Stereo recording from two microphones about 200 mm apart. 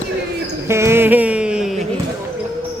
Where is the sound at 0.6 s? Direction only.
15° right (ahead or behind).